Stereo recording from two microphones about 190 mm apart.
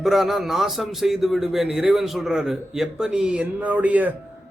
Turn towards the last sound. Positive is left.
turn(degrees=-10)  # may be behind; listen again after turning